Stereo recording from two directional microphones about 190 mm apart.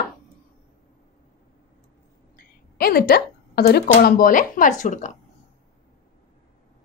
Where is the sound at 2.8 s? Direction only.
50° left (ahead or behind).